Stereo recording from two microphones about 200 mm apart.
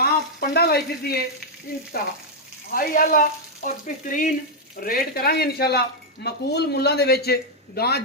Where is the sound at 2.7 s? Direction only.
45° left (ahead or behind).